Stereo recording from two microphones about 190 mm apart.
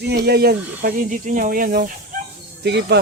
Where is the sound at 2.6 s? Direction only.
60° right (ahead or behind).